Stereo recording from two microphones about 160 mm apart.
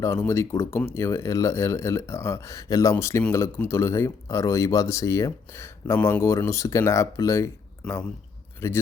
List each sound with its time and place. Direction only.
0.0 s speech: 15° left (ahead or behind)